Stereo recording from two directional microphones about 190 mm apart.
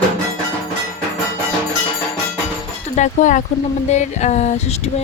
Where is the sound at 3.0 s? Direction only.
40° left (ahead or behind).